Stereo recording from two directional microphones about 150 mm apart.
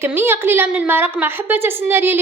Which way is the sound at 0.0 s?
15° right (ahead or behind).